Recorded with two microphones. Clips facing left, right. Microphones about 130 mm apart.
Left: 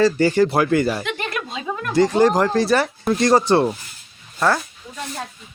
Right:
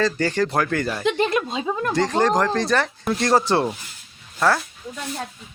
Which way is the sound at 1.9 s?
5° left (ahead or behind).